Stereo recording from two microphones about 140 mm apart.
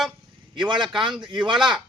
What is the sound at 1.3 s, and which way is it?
Speech, 35° right (ahead or behind).